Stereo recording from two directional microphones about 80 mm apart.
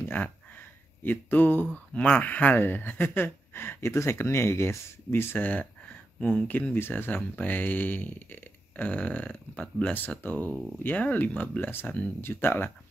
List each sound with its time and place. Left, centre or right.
1.0 s speech: left